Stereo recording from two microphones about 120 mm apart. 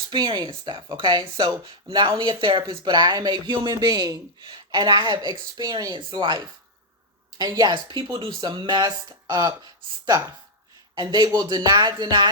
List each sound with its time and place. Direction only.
0.1 s speech: 35° right (ahead or behind)
10.9 s speech: 40° right (ahead or behind)